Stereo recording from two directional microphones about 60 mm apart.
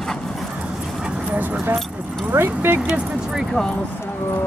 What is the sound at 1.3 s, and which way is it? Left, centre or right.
Speech, right.